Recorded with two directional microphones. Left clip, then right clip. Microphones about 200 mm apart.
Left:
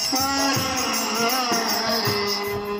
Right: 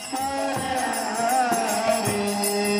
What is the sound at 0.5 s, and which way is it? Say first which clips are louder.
Music: left 2 dB; 20° right (ahead or behind).